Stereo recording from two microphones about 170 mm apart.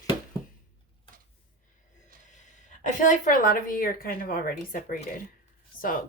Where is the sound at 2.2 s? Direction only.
45° left (ahead or behind).